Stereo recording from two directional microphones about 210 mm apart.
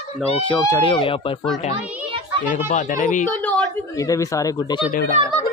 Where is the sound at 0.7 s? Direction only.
25° left (ahead or behind).